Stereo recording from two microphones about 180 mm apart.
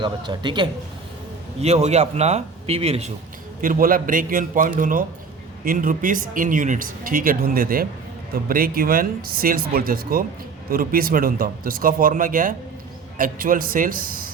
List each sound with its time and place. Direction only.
0.0 s a man's voice: 25° right (ahead or behind)
1.6 s speech: 35° right (ahead or behind)
3.6 s speech: 50° right (ahead or behind)